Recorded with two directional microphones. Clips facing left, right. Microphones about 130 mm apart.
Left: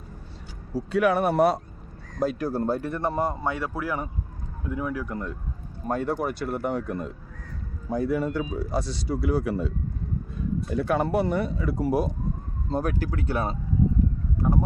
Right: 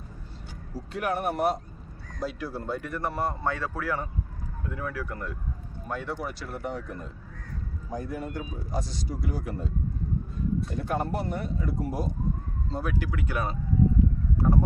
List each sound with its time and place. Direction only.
0.8 s speech: 75° left (ahead or behind)
2.1 s speech: 50° left (ahead or behind)
2.9 s a man's voice: 25° left (ahead or behind)
5.9 s speech: 45° left (ahead or behind); by 9.7 s 90° left
10.8 s speech: 80° left
12.7 s speech: 45° left (ahead or behind); by 13.6 s 30° left (ahead or behind)